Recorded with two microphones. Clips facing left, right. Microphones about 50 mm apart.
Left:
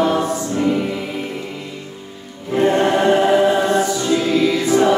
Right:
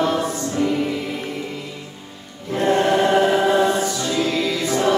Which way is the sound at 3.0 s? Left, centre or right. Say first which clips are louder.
Left 3 dB; centre.